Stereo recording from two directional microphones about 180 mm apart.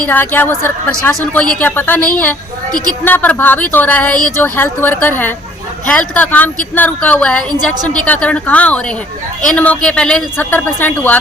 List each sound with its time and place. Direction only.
0.0 s a man's voice: 10° left (ahead or behind)